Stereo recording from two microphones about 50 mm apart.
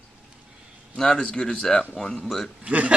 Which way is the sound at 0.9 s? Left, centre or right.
Centre.